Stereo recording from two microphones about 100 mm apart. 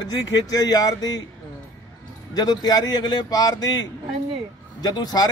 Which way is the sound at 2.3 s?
40° left (ahead or behind).